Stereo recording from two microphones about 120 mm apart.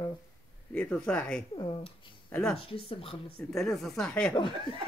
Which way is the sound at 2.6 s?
50° left (ahead or behind).